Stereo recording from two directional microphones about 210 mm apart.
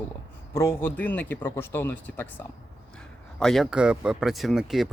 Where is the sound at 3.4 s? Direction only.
Centre (ahead or behind).